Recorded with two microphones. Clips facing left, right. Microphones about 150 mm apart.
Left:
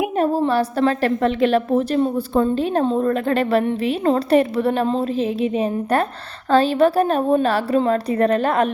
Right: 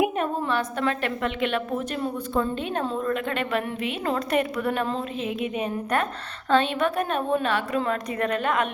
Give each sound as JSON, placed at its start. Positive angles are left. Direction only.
{"t": 0.2, "sound": "a woman's voice", "side_deg": 35}